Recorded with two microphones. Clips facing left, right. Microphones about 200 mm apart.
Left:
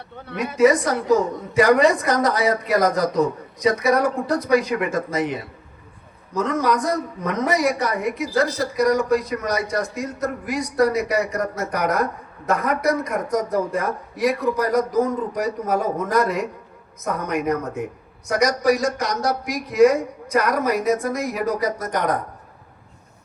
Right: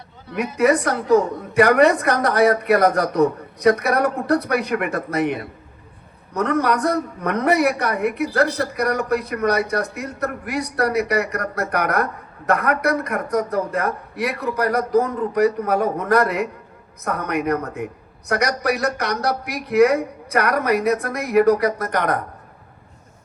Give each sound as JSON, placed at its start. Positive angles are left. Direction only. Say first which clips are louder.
{"t": 0.5, "sound": "a woman's voice", "louder": "left 2 dB", "side_deg": -65}